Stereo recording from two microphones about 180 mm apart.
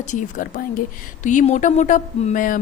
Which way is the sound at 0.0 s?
45° left (ahead or behind).